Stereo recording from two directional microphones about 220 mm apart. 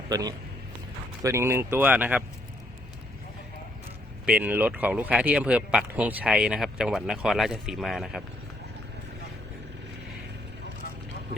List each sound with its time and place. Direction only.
0.1 s speech: 15° right (ahead or behind)
4.3 s speech: 5° right (ahead or behind)